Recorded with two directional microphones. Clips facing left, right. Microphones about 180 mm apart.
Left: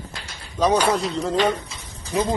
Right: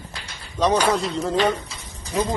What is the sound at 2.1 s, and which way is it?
Speech, 10° left (ahead or behind).